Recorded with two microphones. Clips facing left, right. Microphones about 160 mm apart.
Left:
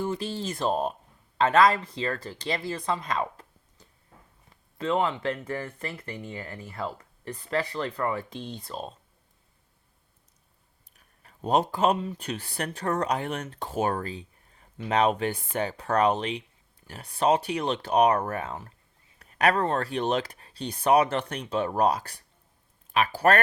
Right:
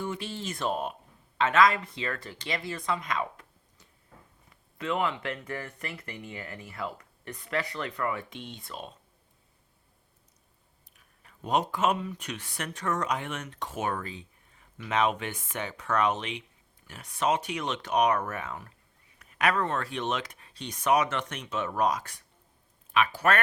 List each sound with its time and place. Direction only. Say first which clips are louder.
0.0 s speech: left 4 dB; 35° left (ahead or behind)
10.9 s speech: left 2 dB; 40° left (ahead or behind)